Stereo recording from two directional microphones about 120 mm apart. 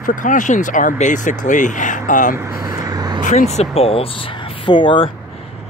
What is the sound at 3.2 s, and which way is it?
Speech, 70° left (ahead or behind).